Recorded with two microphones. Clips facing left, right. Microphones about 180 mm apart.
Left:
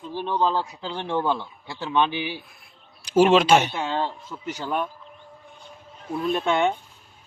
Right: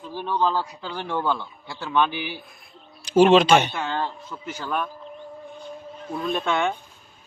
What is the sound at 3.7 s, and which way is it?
A man's voice, 20° left (ahead or behind).